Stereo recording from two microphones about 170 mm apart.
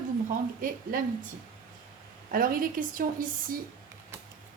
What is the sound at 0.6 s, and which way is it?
Speech, 55° right (ahead or behind).